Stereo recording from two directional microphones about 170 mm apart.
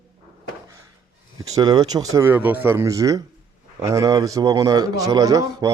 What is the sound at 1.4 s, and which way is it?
A man's voice, 20° right (ahead or behind).